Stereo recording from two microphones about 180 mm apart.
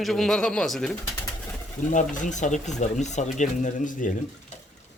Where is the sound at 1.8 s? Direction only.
45° left (ahead or behind).